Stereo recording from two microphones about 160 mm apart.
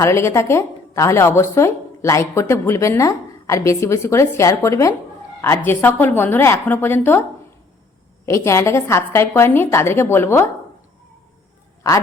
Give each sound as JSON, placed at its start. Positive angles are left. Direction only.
{"t": 0.0, "sound": "a woman's voice", "side_deg": 15}
{"t": 8.3, "sound": "a woman's voice", "side_deg": 15}